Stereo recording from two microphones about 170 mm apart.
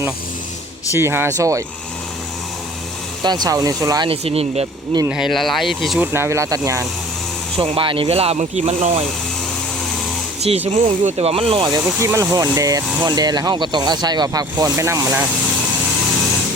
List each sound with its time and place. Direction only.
0.9 s speech: 15° right (ahead or behind)
3.2 s speech: 25° right (ahead or behind)
4.1 s speech: 35° right (ahead or behind)
5.0 s speech: 5° right (ahead or behind)
6.0 s speech: 15° right (ahead or behind)
7.6 s speech: 30° right (ahead or behind)
10.5 s speech: 35° right (ahead or behind); by 15.3 s 15° right (ahead or behind)